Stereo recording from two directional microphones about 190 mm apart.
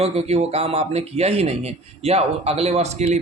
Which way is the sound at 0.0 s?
35° right (ahead or behind).